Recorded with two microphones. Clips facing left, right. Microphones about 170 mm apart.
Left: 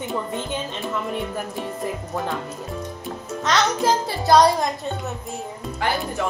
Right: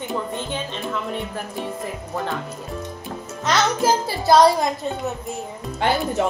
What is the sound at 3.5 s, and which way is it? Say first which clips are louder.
A child's voice: right 1 dB; centre (ahead or behind).